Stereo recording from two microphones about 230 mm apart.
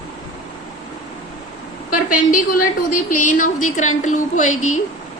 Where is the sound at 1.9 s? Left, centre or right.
Left.